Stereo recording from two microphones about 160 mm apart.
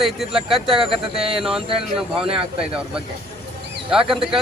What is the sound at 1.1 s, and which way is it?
Speech, 35° right (ahead or behind).